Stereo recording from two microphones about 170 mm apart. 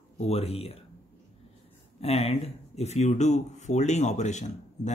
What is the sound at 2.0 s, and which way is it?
Speech, 40° left (ahead or behind).